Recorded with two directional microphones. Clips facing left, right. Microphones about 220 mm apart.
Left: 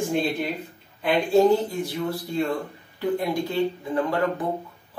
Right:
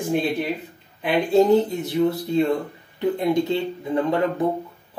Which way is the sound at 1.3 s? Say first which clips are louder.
Right 2 dB; 20° right (ahead or behind).